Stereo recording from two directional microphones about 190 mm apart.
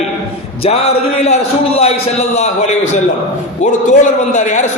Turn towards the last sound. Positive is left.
turn(degrees=40)  # may be behind; listen again after turning